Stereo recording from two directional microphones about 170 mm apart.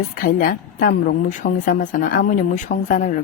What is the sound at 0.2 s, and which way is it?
A woman's voice, 60° left (ahead or behind).